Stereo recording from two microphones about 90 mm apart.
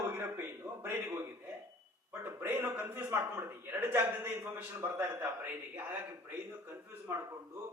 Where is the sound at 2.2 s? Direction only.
25° right (ahead or behind).